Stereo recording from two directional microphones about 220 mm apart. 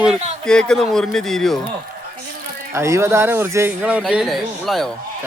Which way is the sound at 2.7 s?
10° right (ahead or behind).